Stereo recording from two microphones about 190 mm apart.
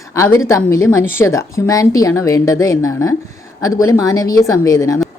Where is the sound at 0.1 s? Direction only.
15° left (ahead or behind).